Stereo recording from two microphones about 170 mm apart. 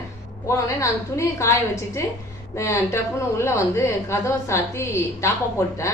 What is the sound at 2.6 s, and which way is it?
Speech, 15° left (ahead or behind).